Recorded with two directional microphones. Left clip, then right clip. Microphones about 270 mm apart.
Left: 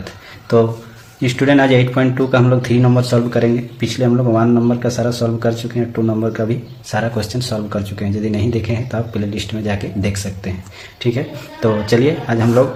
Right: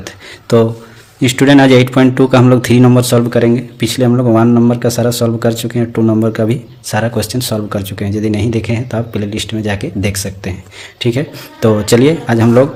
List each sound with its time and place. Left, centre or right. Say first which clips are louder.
0.0 s a sound: right 4 dB; right
1.2 s a man's voice: right 5 dB; right
11.6 s a man's voice: right 5 dB; right